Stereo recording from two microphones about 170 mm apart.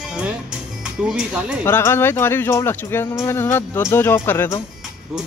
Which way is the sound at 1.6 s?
15° left (ahead or behind).